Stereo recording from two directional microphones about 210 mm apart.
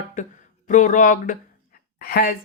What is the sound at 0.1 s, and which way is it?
Speech, 35° left (ahead or behind).